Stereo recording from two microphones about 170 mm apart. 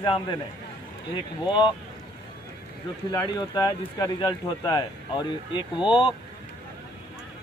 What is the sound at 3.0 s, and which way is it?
Speech, 25° left (ahead or behind).